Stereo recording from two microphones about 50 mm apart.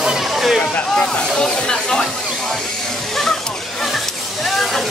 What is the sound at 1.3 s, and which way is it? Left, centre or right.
Speech, centre.